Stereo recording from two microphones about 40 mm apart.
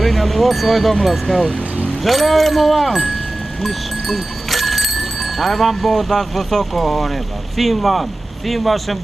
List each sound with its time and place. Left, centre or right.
0.0 s speech: centre